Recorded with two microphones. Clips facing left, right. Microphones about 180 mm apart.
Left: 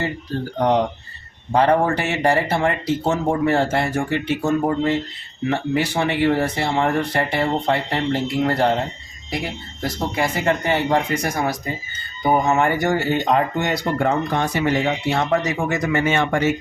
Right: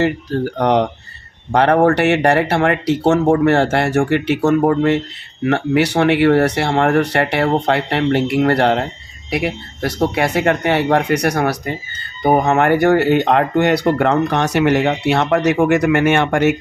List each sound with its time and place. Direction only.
0.0 s speech: 70° right (ahead or behind)